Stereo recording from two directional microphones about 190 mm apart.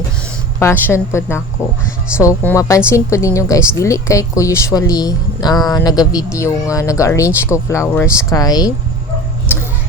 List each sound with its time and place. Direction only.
0.6 s a woman's voice: 10° left (ahead or behind)